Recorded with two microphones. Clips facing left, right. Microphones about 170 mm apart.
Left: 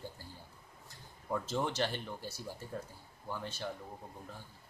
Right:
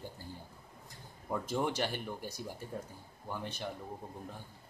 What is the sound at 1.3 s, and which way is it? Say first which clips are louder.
Speech: right 1 dB; 10° right (ahead or behind).